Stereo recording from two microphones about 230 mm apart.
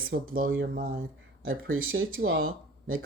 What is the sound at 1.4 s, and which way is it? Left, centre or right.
Speech, right.